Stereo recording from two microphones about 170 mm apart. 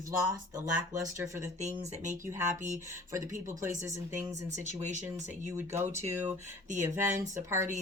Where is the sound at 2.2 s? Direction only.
15° right (ahead or behind).